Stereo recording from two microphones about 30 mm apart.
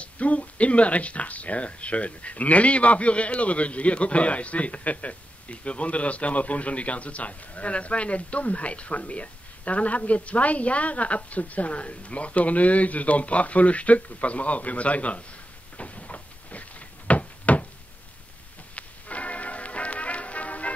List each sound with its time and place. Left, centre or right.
0.0 s a man's voice: left
15.8 s vehicle: left
17.1 s knock: left
18.8 s music: left